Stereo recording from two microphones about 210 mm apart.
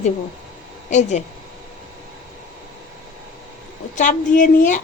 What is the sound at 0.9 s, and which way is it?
Speech, 35° left (ahead or behind).